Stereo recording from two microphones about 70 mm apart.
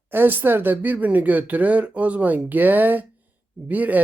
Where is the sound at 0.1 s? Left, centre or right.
Right.